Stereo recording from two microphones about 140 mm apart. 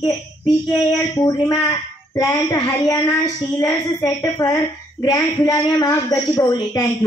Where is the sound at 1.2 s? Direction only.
25° left (ahead or behind).